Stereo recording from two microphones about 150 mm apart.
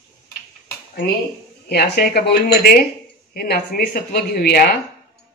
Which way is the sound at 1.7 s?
90° left.